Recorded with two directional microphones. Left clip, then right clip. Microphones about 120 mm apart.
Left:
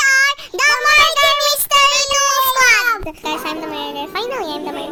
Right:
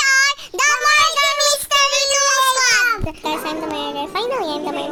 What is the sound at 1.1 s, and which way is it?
Child singing, 25° left (ahead or behind).